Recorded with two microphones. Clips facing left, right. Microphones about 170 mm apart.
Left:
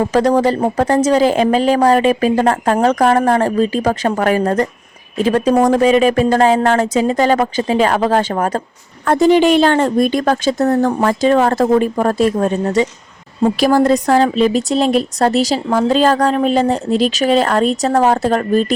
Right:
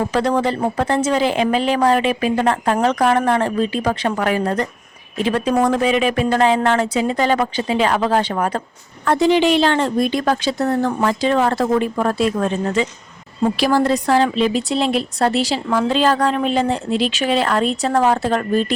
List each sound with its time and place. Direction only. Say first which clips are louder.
0.1 s a woman's voice: left 5 dB; 40° left (ahead or behind)